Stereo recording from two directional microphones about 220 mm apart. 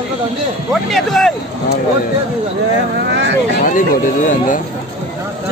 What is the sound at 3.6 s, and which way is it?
Speech, 35° left (ahead or behind).